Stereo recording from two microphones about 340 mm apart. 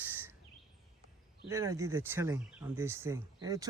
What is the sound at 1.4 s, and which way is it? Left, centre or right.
Speech, centre.